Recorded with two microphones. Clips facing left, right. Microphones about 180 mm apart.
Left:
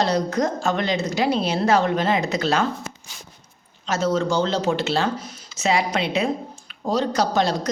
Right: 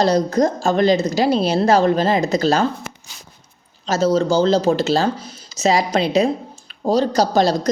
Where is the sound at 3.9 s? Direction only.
35° right (ahead or behind).